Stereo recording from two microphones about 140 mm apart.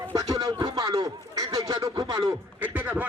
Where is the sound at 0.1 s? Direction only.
30° right (ahead or behind).